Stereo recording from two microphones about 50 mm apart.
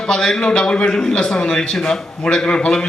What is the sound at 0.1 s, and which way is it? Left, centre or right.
A man's voice, centre.